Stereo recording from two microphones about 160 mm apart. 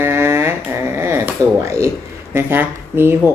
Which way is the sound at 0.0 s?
15° right (ahead or behind).